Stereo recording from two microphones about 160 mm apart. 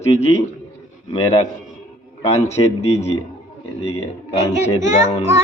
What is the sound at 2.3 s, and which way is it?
Speech, 45° left (ahead or behind).